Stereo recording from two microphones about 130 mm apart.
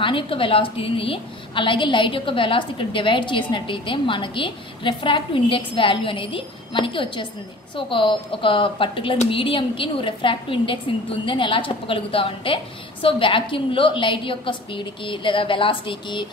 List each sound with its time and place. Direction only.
0.0 s a woman's voice: 40° left (ahead or behind)